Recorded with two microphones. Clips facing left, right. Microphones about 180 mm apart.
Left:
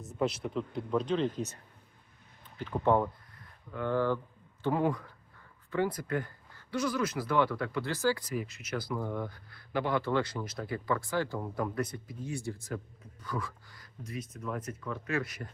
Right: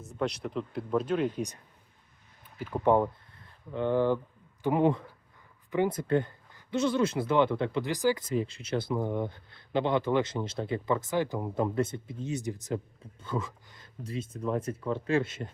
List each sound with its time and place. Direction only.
0.0 s speech: centre (ahead or behind)
2.6 s speech: 10° right (ahead or behind); by 15.5 s 25° right (ahead or behind)